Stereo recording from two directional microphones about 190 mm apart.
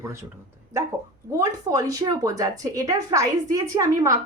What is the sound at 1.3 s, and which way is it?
A woman's voice, 20° right (ahead or behind).